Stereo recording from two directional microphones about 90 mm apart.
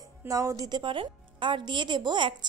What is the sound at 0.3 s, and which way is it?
A woman's voice, 40° right (ahead or behind).